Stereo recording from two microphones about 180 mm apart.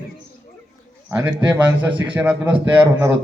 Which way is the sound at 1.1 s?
10° right (ahead or behind).